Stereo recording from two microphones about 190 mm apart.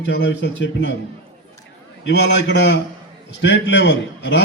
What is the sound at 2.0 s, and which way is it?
A man's voice, 65° left (ahead or behind).